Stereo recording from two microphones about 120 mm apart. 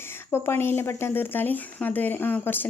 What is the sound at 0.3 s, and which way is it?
A woman's voice, 20° left (ahead or behind).